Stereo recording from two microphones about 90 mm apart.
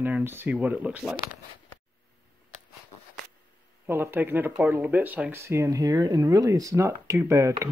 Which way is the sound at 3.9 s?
25° right (ahead or behind).